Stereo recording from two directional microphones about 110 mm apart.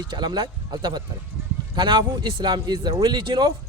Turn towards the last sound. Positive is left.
turn(degrees=-45)  # may be behind; listen again after turning